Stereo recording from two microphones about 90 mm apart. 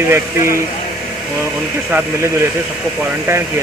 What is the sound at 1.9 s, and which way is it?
Speech, 25° right (ahead or behind).